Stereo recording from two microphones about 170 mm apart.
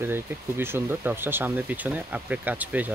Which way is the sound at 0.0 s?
15° right (ahead or behind).